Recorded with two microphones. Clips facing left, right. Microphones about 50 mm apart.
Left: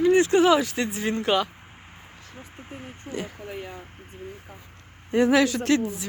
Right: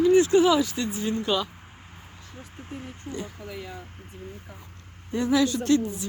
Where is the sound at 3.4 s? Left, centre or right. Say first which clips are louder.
Left 2 dB; left.